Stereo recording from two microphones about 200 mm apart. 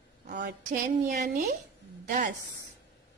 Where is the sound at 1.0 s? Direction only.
50° right (ahead or behind).